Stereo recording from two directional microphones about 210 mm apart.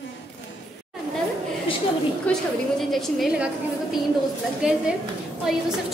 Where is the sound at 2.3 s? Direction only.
5° left (ahead or behind).